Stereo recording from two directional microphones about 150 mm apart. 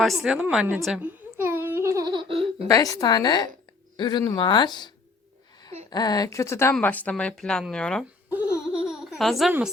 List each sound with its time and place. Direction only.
0.0 s a woman's voice: centre (ahead or behind)
0.9 s babbling: 10° right (ahead or behind)
2.1 s baby laughter: 35° right (ahead or behind)
2.6 s speech: 25° left (ahead or behind)
5.9 s a woman's voice: 25° left (ahead or behind); by 8.0 s 5° left (ahead or behind)
8.8 s a sound: 5° right (ahead or behind)